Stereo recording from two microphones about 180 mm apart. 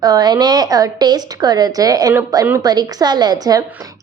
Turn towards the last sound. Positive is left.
turn(degrees=-20)  # may be behind; listen again after turning